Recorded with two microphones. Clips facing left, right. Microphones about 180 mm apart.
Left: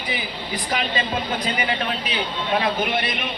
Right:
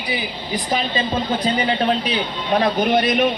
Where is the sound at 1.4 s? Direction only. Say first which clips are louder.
Right 6 dB; 35° right (ahead or behind).